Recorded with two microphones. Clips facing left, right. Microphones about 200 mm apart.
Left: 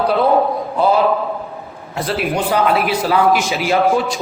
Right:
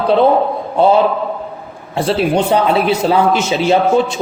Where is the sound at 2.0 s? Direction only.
30° right (ahead or behind).